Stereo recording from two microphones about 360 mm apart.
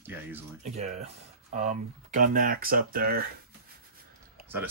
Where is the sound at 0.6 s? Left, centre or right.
Centre.